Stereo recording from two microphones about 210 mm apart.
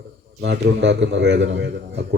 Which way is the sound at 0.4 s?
55° right (ahead or behind).